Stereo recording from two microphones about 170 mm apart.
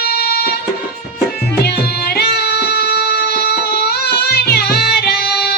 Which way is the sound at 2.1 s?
70° left (ahead or behind).